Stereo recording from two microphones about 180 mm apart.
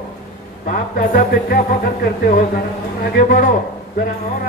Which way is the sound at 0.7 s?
50° left (ahead or behind).